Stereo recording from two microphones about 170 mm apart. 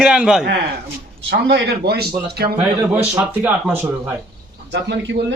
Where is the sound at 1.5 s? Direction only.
70° right (ahead or behind).